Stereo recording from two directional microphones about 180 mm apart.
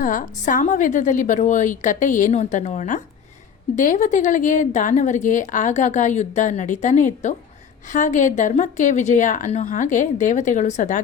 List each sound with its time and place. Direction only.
0.0 s a woman's voice: 50° left (ahead or behind)